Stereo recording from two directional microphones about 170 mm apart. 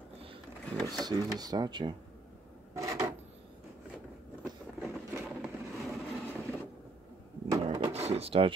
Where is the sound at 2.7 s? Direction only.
20° right (ahead or behind).